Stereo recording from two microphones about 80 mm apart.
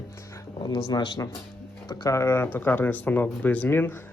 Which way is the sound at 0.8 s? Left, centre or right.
Left.